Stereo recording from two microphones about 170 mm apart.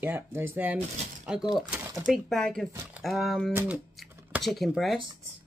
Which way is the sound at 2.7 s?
15° right (ahead or behind).